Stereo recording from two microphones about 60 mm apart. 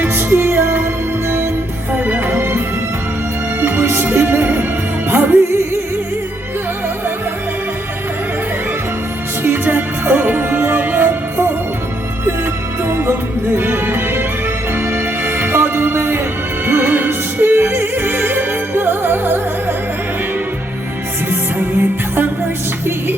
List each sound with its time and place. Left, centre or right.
0.0 s music: right
1.9 s music: right
2.3 s music: right
3.6 s music: right
9.4 s music: right
12.9 s music: right
21.8 s music: right